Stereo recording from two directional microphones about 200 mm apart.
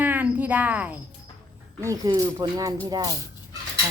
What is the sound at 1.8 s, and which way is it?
Speech, 20° right (ahead or behind).